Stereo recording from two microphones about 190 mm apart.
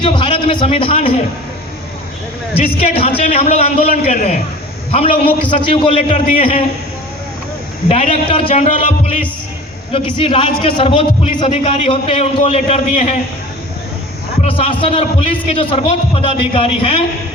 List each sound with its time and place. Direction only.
0.0 s a man's voice: 25° left (ahead or behind)
2.6 s a man's voice: 30° left (ahead or behind)
7.9 s a man's voice: 35° left (ahead or behind)
9.9 s a man's voice: 30° left (ahead or behind)
14.4 s a man's voice: 30° left (ahead or behind)